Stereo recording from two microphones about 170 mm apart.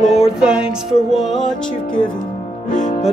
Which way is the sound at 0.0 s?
40° left (ahead or behind).